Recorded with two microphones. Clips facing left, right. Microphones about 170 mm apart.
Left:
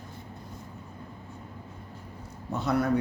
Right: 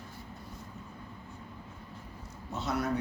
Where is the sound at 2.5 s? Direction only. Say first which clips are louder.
Left 6 dB; 60° left (ahead or behind).